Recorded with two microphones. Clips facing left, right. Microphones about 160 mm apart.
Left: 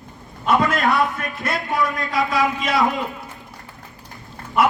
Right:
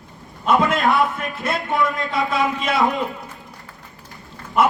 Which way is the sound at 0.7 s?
Centre (ahead or behind).